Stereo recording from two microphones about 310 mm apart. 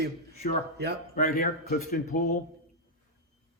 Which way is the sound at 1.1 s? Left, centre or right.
Left.